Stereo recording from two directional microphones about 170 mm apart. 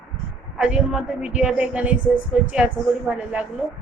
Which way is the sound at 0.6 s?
5° right (ahead or behind).